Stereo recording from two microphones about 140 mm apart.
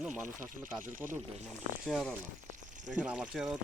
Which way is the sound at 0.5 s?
70° right (ahead or behind).